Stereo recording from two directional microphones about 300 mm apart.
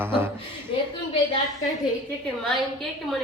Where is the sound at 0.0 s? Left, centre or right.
Centre.